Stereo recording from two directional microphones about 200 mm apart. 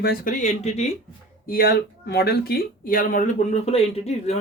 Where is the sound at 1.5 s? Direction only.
50° left (ahead or behind).